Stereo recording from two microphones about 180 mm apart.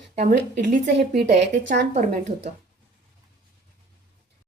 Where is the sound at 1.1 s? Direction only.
40° right (ahead or behind).